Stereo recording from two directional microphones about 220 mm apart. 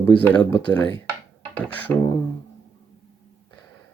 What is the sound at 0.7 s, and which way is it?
Speech, 10° left (ahead or behind).